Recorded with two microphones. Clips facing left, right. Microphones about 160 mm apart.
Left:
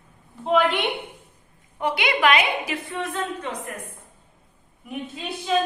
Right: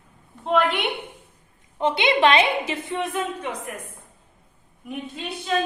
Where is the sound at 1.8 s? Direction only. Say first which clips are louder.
Right 3 dB; 25° right (ahead or behind).